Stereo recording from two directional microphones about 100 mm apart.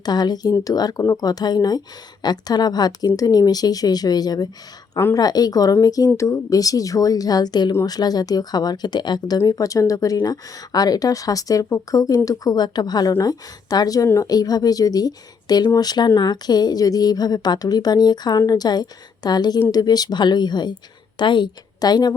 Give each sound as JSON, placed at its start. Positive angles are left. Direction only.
{"t": 0.0, "sound": "a woman's voice", "side_deg": 45}